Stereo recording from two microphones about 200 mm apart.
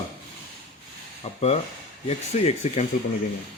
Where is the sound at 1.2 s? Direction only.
30° left (ahead or behind).